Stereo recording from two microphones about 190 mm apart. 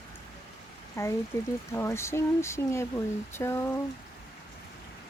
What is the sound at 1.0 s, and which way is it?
Speech, 15° left (ahead or behind).